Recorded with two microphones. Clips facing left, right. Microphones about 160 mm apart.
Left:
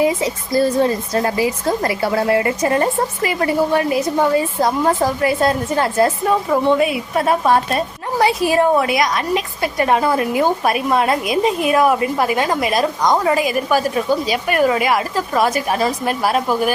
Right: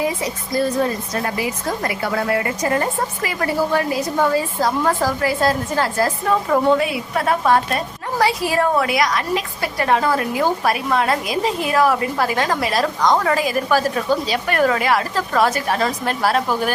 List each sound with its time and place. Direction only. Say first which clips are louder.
0.0 s a woman's voice: left 5 dB; 30° left (ahead or behind)
7.3 s a woman's voice: left 1 dB; 20° left (ahead or behind)